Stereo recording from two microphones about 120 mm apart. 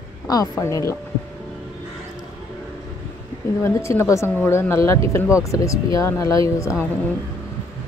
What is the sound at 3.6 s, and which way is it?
Speech, 25° left (ahead or behind).